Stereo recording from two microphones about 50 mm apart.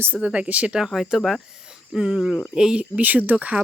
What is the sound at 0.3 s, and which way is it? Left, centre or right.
Speech, right.